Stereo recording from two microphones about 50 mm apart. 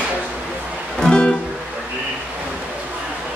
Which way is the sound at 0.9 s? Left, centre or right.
Centre.